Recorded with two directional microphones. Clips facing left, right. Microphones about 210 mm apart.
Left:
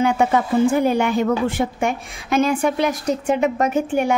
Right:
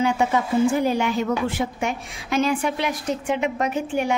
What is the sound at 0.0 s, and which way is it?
A woman's voice, 55° left (ahead or behind).